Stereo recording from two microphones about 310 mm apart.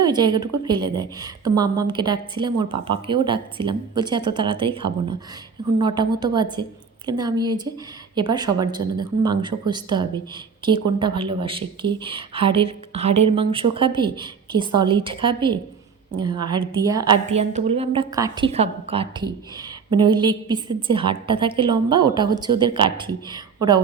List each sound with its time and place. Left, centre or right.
0.0 s a woman's voice: centre